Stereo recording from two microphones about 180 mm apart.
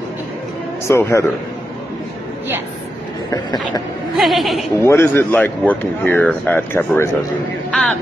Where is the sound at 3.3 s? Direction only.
20° left (ahead or behind).